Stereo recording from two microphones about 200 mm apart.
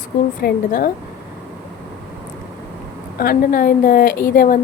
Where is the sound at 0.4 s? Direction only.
45° left (ahead or behind).